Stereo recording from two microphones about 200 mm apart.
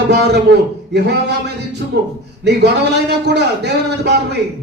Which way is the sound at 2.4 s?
55° right (ahead or behind).